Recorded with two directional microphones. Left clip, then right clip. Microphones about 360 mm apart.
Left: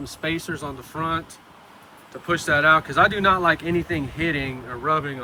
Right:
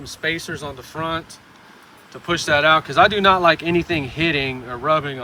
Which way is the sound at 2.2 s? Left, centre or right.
Centre.